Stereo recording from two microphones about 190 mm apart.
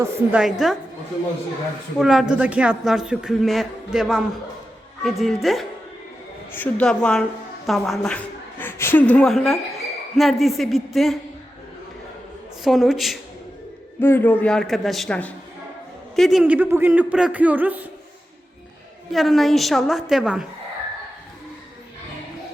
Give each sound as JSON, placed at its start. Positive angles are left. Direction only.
{"t": 0.0, "sound": "a man's voice", "side_deg": -5}
{"t": 2.0, "sound": "a man's voice", "side_deg": 0}
{"t": 12.6, "sound": "a man's voice", "side_deg": 0}
{"t": 14.0, "sound": "a man's voice", "side_deg": 10}
{"t": 19.1, "sound": "a man's voice", "side_deg": 0}